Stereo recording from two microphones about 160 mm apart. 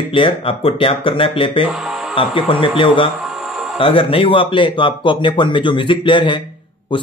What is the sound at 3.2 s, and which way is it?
Music, 5° right (ahead or behind).